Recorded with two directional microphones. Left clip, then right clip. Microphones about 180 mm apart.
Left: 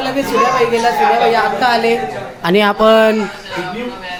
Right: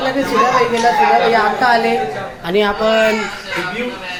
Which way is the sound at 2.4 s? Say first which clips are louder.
Left 4 dB; 60° left (ahead or behind).